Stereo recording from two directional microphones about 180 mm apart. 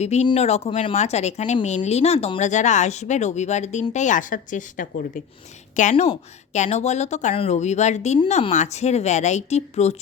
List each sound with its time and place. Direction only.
0.0 s a woman's voice: 35° left (ahead or behind)